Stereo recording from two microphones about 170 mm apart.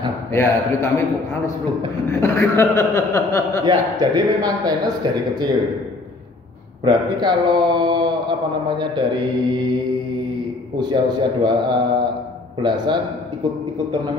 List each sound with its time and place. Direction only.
0.3 s speech: 15° left (ahead or behind)
2.0 s speech: 15° left (ahead or behind)
3.6 s speech: 25° right (ahead or behind)
6.8 s speech: 25° right (ahead or behind)
10.8 s speech: 25° right (ahead or behind)